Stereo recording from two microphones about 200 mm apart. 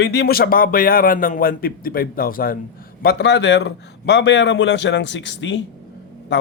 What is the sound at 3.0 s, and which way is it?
A man's voice, 60° left (ahead or behind).